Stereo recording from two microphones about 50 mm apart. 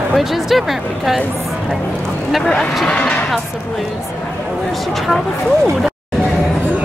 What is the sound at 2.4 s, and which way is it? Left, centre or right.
Speech, centre.